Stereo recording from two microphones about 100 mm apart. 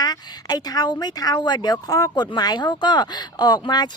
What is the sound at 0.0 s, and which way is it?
Speech, 40° left (ahead or behind).